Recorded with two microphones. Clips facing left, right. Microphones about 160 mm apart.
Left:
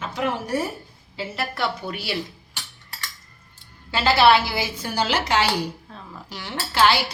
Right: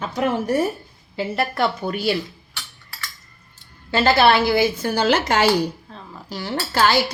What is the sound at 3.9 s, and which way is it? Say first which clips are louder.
A woman's voice: right 1 dB; 50° right (ahead or behind).